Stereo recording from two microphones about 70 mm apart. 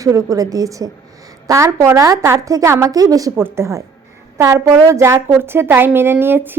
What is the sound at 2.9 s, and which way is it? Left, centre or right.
Speech, right.